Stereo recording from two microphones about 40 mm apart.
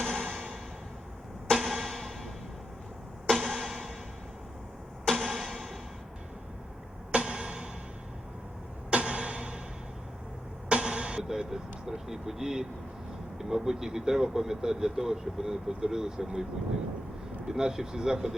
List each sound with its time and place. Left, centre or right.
0.2 s music: centre
1.5 s music: centre
5.0 s music: centre
7.1 s music: right
8.9 s a sound: right
10.7 s a sound: right
11.2 s speech: centre
17.5 s speech: centre